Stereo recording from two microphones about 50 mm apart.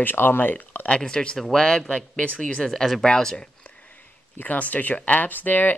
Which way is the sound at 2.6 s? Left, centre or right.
Centre.